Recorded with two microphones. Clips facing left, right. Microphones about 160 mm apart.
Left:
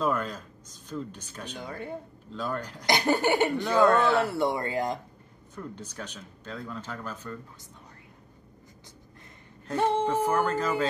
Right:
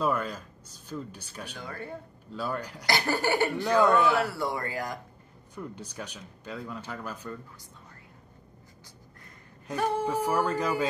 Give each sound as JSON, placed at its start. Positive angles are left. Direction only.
{"t": 0.0, "sound": "speech", "side_deg": -10}
{"t": 1.6, "sound": "speech", "side_deg": 15}
{"t": 2.3, "sound": "speech", "side_deg": -10}
{"t": 2.9, "sound": "speech", "side_deg": 20}
{"t": 5.5, "sound": "speech", "side_deg": -10}
{"t": 9.8, "sound": "speech", "side_deg": 25}
{"t": 10.0, "sound": "speech", "side_deg": -10}